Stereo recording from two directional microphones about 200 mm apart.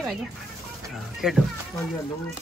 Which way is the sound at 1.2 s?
5° right (ahead or behind).